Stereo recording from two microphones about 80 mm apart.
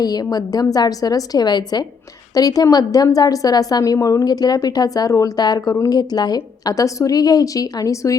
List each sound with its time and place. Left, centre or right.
0.0 s a woman's voice: left
2.3 s a woman's voice: left